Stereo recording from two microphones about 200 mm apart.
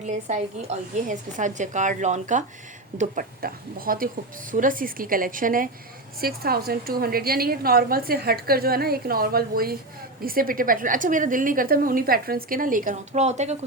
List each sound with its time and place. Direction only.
0.0 s a woman's voice: 35° right (ahead or behind)